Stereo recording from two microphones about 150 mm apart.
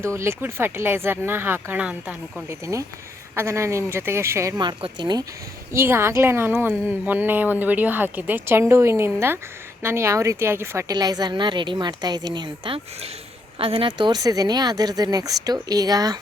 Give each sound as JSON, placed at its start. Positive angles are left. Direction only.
{"t": 0.0, "sound": "a woman's voice", "side_deg": -20}
{"t": 2.5, "sound": "a woman's voice", "side_deg": -20}
{"t": 5.7, "sound": "a woman's voice", "side_deg": -15}